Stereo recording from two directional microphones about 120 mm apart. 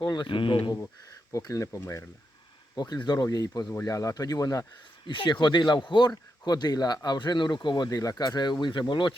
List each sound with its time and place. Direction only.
0.0 s speech: 30° left (ahead or behind)
0.3 s speech: 45° left (ahead or behind)
1.3 s speech: 30° left (ahead or behind)
2.7 s speech: 35° left (ahead or behind)
5.0 s speech: 40° left (ahead or behind)